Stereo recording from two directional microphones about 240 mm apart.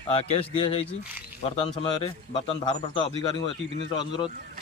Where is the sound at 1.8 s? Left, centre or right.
Centre.